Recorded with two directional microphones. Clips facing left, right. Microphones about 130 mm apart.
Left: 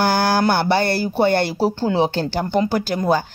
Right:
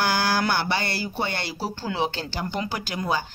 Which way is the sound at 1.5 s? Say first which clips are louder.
Left 9 dB; 30° left (ahead or behind).